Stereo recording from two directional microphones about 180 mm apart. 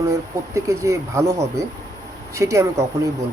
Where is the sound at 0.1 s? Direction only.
15° right (ahead or behind).